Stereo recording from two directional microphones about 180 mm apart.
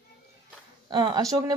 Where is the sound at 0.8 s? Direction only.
25° right (ahead or behind).